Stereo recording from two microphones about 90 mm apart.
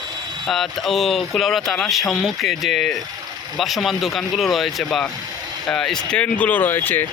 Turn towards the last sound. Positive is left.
turn(degrees=20)  # may be behind; listen again after turning